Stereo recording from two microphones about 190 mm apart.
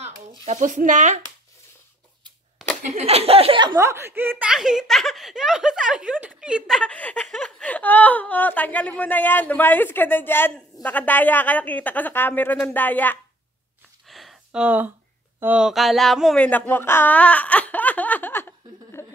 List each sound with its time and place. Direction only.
0.5 s speech: 40° right (ahead or behind)
2.8 s speech: 35° right (ahead or behind)
3.7 s speech: 15° right (ahead or behind)
6.8 s speech: 5° left (ahead or behind)
14.0 s a sound: centre (ahead or behind)